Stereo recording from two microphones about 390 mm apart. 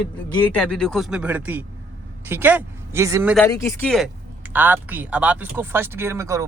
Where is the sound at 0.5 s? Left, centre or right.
Centre.